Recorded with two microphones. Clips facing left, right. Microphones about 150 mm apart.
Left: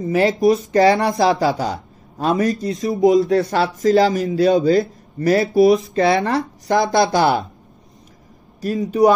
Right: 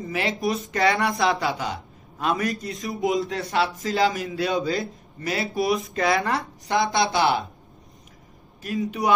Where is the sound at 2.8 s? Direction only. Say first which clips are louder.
Left 10 dB; 45° left (ahead or behind).